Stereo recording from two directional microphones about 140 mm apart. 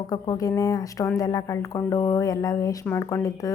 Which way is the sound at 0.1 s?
25° left (ahead or behind).